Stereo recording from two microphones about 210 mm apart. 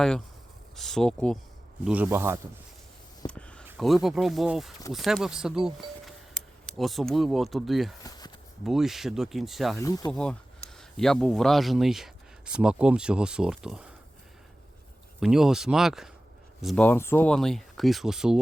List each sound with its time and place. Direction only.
0.8 s speech: centre (ahead or behind)
3.2 s a sound: 5° left (ahead or behind)
3.8 s speech: centre (ahead or behind)
8.0 s a sound: 20° left (ahead or behind)
8.6 s speech: centre (ahead or behind)
9.7 s speech: 15° left (ahead or behind)
10.1 s speech: 5° left (ahead or behind)
15.2 s speech: centre (ahead or behind)